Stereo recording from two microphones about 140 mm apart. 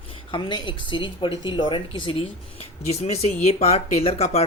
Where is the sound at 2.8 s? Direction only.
50° left (ahead or behind).